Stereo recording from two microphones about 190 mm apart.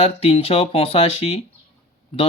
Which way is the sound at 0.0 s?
30° left (ahead or behind).